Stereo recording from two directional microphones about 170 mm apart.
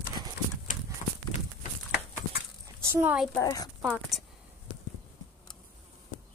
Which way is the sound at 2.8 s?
15° right (ahead or behind).